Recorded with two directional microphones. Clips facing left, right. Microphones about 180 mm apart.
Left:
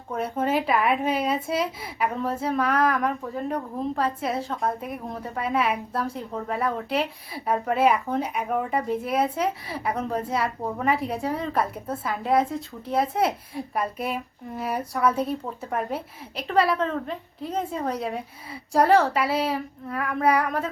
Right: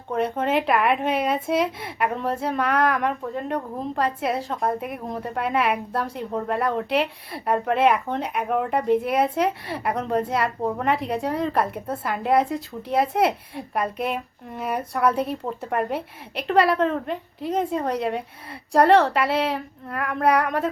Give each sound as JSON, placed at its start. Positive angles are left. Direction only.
{"t": 0.1, "sound": "speech", "side_deg": 5}